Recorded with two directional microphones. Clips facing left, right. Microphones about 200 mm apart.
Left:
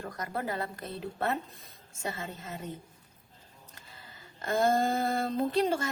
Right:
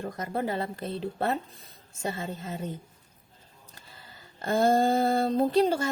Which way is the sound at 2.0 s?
30° right (ahead or behind).